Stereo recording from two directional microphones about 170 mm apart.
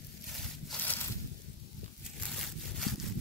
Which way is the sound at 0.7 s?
10° left (ahead or behind).